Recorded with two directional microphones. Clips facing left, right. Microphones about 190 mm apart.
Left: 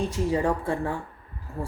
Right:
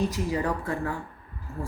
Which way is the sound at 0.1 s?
30° left (ahead or behind).